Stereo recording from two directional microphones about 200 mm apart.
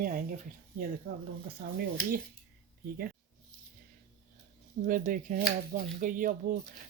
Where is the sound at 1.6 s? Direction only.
45° right (ahead or behind).